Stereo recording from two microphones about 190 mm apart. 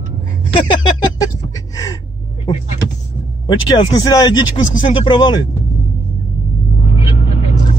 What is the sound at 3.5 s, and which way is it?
Speech, 20° left (ahead or behind).